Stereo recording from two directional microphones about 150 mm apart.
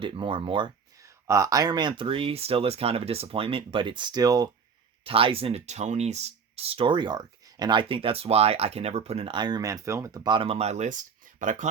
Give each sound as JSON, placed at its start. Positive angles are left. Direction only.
{"t": 0.0, "sound": "speech", "side_deg": -35}
{"t": 0.9, "sound": "speech", "side_deg": -20}
{"t": 5.0, "sound": "speech", "side_deg": -40}